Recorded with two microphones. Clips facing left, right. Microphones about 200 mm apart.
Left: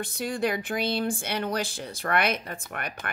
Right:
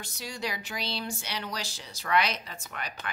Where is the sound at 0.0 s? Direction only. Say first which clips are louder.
Left 9 dB; 55° left (ahead or behind).